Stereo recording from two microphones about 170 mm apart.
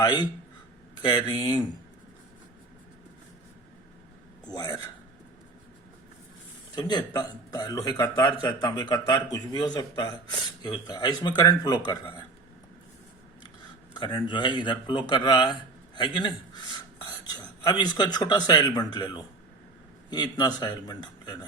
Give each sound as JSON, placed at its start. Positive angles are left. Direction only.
{"t": 0.0, "sound": "speech", "side_deg": 25}
{"t": 4.4, "sound": "speech", "side_deg": 25}
{"t": 6.7, "sound": "speech", "side_deg": 25}
{"t": 13.9, "sound": "a man's voice", "side_deg": 30}